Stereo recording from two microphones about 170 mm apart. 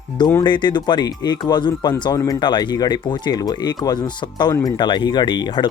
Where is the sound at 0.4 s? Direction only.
25° left (ahead or behind).